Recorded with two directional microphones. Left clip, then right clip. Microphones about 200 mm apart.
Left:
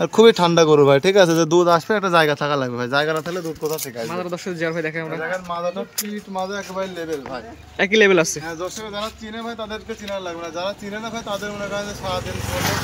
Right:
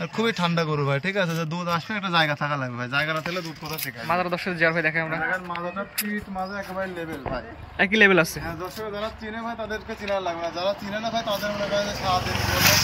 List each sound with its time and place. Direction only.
0.0 s a man's voice: 45° left (ahead or behind); by 3.4 s 30° left (ahead or behind)
4.1 s a man's voice: 15° left (ahead or behind)
7.7 s a man's voice: 15° left (ahead or behind)
10.1 s speech: 25° left (ahead or behind)